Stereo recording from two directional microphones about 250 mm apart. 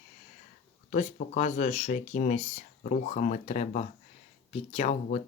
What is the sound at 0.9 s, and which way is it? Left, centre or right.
Speech, left.